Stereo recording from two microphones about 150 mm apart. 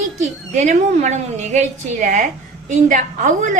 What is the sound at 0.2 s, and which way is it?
A woman's voice, 55° right (ahead or behind).